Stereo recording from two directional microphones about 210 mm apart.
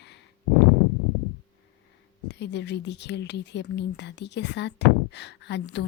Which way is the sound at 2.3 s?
55° left (ahead or behind).